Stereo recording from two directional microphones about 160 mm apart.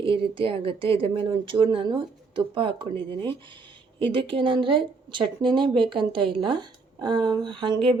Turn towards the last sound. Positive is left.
turn(degrees=-30)  # may be behind; listen again after turning